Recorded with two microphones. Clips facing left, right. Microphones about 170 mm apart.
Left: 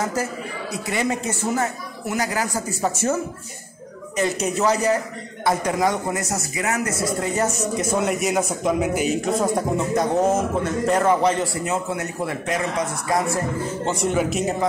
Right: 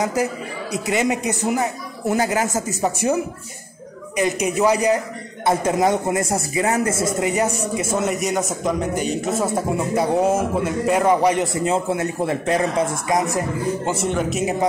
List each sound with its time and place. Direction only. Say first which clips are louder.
0.0 s speech: right 3 dB; 15° right (ahead or behind)
2.0 s speech: right 5 dB; 25° right (ahead or behind)
4.2 s speech: right 2 dB; 15° right (ahead or behind)
5.4 s speech: right 2 dB; 25° right (ahead or behind)
13.1 s speech: even; 20° right (ahead or behind)
13.8 s speech: even; centre (ahead or behind)